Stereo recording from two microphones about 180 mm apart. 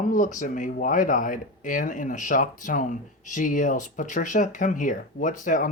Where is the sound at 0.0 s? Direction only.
45° left (ahead or behind).